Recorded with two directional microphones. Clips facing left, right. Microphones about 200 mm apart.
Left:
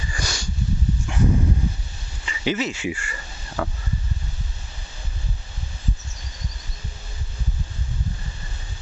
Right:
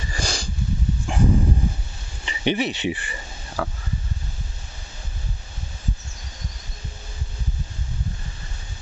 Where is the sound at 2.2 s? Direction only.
20° right (ahead or behind).